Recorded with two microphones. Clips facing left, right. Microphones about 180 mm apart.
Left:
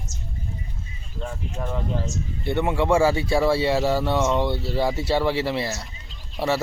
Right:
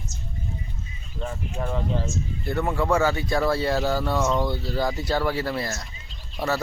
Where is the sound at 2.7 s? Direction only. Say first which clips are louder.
Left 3 dB; 25° left (ahead or behind).